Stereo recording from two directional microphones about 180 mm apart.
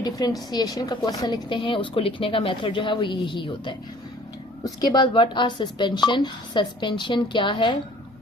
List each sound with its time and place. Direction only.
0.0 s a woman's voice: 20° left (ahead or behind)